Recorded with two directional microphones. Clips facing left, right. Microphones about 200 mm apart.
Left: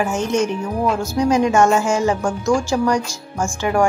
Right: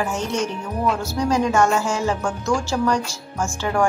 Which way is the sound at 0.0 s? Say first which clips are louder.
Left 5 dB; 20° left (ahead or behind).